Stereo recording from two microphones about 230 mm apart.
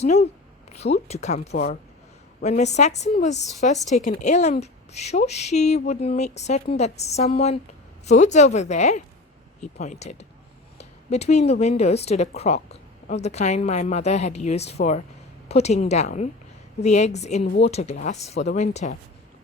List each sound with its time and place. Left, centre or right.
0.0 s a woman's voice: left
0.7 s a sound: left
1.0 s a woman's voice: left